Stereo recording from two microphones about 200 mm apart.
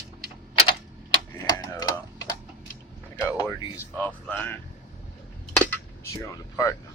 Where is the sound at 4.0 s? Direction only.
10° left (ahead or behind).